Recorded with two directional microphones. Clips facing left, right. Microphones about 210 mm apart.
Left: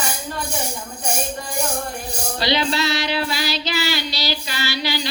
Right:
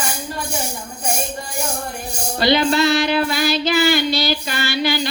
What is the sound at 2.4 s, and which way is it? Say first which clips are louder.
Female singing: right 6 dB; 50° right (ahead or behind).